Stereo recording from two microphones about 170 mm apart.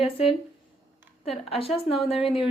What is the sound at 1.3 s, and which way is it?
Speech, 35° left (ahead or behind).